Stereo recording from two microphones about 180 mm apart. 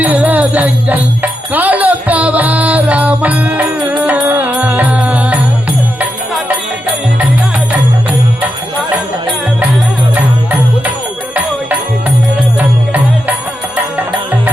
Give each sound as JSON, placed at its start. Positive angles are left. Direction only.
{"t": 0.0, "sound": "music", "side_deg": -10}
{"t": 12.5, "sound": "music", "side_deg": -10}